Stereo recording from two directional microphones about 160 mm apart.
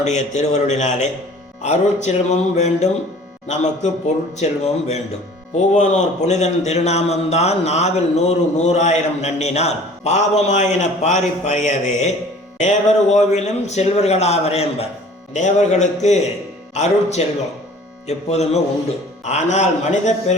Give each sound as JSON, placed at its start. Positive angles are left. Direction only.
{"t": 0.0, "sound": "a man's voice", "side_deg": 45}